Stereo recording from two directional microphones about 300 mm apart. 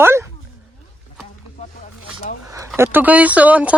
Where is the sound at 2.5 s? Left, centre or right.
Centre.